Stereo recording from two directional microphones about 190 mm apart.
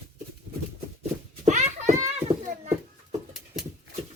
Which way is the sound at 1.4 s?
40° right (ahead or behind).